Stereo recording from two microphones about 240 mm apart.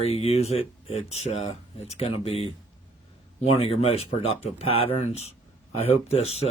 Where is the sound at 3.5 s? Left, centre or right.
Left.